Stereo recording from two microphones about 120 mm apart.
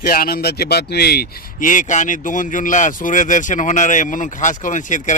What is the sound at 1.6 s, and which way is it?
Speech, 90° left.